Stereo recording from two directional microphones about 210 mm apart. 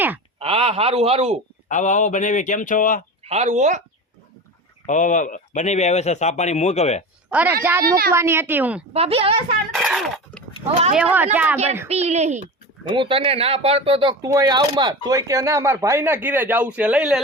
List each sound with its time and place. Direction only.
0.3 s a man's voice: 25° right (ahead or behind)
1.6 s speech: 35° left (ahead or behind)
3.2 s speech: 30° right (ahead or behind)
4.9 s speech: 35° left (ahead or behind)
7.3 s speech: 10° right (ahead or behind)
8.9 s a man's voice: 30° right (ahead or behind)
9.7 s a sound: centre (ahead or behind)
10.7 s speech: 30° right (ahead or behind)
10.9 s speech: 5° right (ahead or behind)
11.9 s speech: 30° right (ahead or behind); by 17.2 s 5° right (ahead or behind)